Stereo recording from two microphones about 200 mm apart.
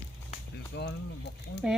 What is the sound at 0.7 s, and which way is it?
Speech, 55° left (ahead or behind).